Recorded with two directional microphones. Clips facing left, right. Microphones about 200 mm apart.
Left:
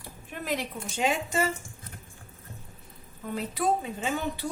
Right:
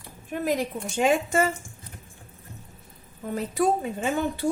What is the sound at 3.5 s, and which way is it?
Speech, 45° right (ahead or behind).